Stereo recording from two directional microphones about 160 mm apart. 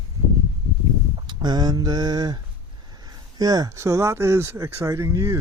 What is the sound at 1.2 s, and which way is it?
Speech, 25° right (ahead or behind).